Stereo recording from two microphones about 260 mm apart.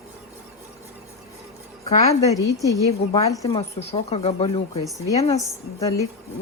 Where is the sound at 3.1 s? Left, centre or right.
Centre.